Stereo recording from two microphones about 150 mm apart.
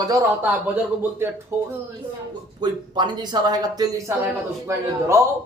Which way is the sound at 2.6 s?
30° right (ahead or behind).